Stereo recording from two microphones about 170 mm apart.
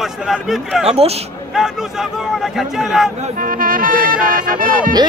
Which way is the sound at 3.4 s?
55° right (ahead or behind).